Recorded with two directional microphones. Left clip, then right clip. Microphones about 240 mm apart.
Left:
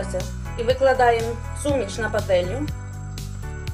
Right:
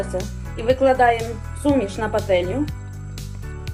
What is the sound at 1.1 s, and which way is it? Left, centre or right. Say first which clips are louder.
Speech: left 2 dB; centre.